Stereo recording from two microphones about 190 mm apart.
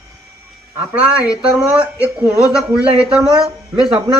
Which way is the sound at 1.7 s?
5° right (ahead or behind).